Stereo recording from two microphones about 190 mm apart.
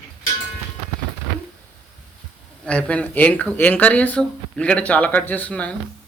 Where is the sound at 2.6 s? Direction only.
5° left (ahead or behind).